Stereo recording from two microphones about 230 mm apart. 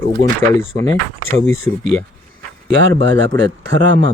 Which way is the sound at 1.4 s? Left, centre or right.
Centre.